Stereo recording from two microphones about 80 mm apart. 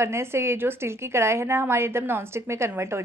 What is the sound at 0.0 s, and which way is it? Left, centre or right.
A woman's voice, right.